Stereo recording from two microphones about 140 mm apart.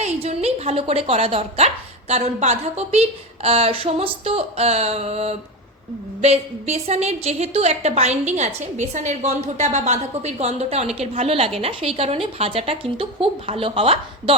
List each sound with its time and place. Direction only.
0.0 s a woman's voice: 50° right (ahead or behind)